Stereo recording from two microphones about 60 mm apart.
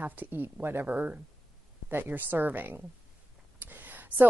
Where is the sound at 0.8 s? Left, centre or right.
Right.